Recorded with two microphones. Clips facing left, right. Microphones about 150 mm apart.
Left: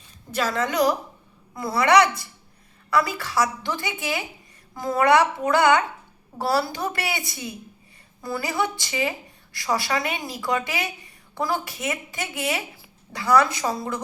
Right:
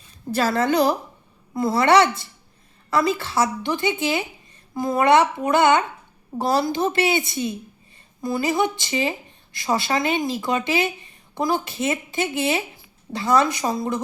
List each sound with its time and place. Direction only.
0.3 s a woman's voice: 35° right (ahead or behind)